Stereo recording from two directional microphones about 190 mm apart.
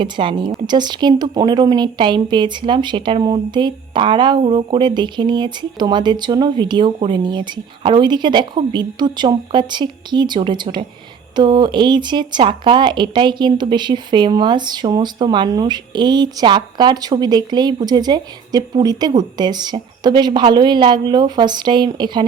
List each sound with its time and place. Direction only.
0.0 s speech: 25° right (ahead or behind)